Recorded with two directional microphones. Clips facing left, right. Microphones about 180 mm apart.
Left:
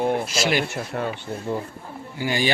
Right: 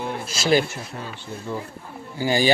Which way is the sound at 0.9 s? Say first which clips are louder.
Left 10 dB; 70° left (ahead or behind).